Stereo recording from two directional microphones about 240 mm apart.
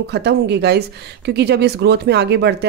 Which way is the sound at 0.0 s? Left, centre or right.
Right.